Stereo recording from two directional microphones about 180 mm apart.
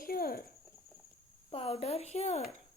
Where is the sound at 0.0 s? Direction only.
55° left (ahead or behind).